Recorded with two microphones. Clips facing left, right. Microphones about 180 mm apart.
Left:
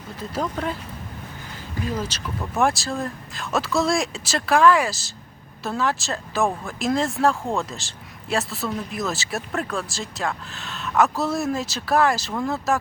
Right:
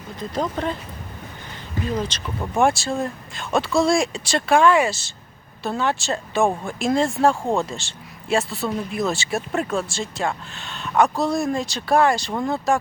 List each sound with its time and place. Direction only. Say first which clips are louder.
0.2 s speech: right 2 dB; 5° left (ahead or behind)
2.0 s a man's voice: right 2 dB; 5° left (ahead or behind)
7.4 s speech: right 4 dB; 35° right (ahead or behind)
7.7 s a man's voice: right 3 dB; centre (ahead or behind)